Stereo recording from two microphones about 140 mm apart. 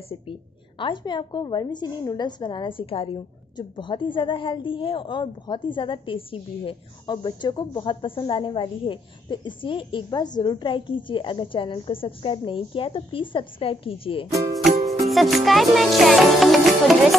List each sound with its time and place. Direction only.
0.3 s a woman's voice: 35° left (ahead or behind)
15.0 s speech: centre (ahead or behind)